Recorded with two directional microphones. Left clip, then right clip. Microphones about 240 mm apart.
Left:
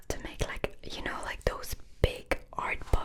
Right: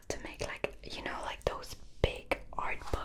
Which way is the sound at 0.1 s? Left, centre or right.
Centre.